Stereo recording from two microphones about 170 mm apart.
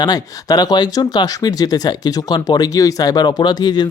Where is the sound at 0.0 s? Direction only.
25° left (ahead or behind).